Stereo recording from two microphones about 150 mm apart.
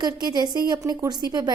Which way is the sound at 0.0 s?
30° right (ahead or behind).